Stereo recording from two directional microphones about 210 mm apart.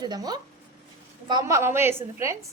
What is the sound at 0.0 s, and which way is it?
A woman's voice, 20° right (ahead or behind).